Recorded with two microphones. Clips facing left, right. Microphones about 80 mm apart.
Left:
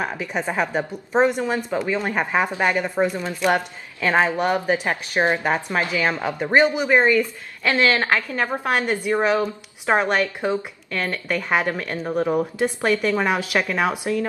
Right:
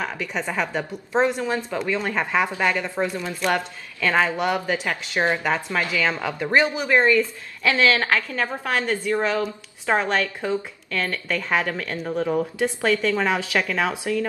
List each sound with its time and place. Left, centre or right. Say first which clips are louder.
0.0 s a woman's voice: left 2 dB; left